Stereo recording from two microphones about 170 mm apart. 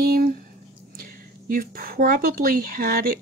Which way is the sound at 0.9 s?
55° right (ahead or behind).